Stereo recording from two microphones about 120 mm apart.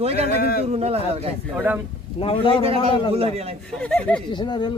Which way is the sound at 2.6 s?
55° right (ahead or behind).